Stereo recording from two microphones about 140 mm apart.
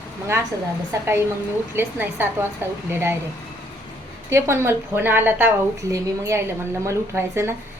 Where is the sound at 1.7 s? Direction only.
15° right (ahead or behind).